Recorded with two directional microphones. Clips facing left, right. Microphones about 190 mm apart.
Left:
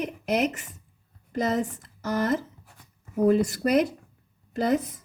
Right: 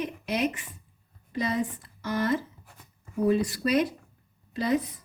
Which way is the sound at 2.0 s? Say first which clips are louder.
Left 2 dB; 45° left (ahead or behind).